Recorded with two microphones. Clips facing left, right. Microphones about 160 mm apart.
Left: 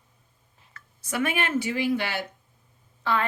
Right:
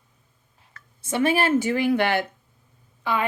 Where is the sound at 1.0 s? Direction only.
25° right (ahead or behind).